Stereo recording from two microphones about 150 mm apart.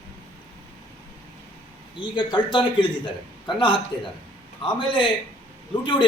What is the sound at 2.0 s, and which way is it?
A man's voice, 30° left (ahead or behind).